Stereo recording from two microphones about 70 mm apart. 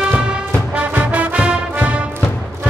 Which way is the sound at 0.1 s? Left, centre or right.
Centre.